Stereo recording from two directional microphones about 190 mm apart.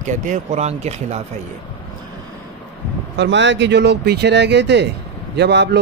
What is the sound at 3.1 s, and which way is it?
Speech, 70° right (ahead or behind).